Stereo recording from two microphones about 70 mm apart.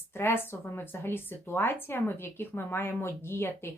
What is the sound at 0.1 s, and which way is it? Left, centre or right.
Speech, left.